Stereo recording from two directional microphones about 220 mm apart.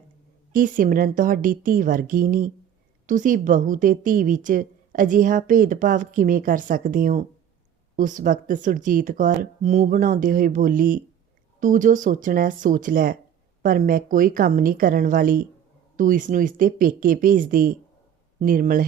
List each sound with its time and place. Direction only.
0.5 s a woman's voice: 40° right (ahead or behind)